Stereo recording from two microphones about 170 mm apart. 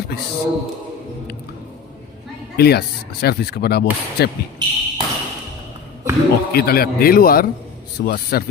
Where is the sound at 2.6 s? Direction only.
70° left (ahead or behind).